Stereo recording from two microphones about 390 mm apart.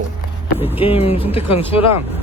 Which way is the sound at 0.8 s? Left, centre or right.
Centre.